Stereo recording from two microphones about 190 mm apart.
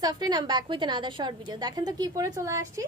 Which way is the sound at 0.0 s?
20° right (ahead or behind).